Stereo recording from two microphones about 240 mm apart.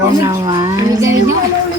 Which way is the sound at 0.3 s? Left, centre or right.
Centre.